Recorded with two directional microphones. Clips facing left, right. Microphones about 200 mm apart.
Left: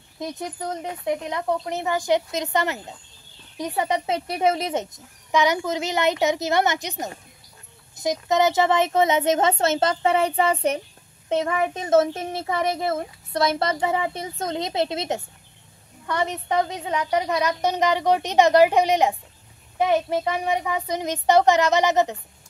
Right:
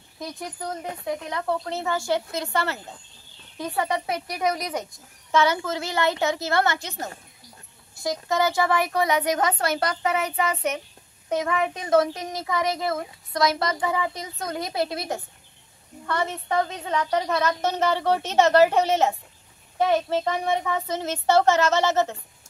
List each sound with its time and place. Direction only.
0.2 s a woman's voice: 20° left (ahead or behind)